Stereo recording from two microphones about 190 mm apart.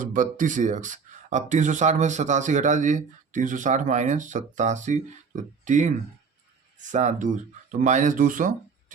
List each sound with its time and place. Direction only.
0.0 s speech: 45° right (ahead or behind)
6.9 s speech: 40° right (ahead or behind)